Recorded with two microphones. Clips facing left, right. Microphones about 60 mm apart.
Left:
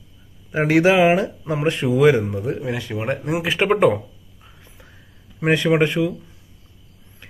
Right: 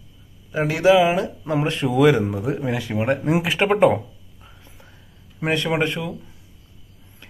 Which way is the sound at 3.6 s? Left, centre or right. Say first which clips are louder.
Even; centre.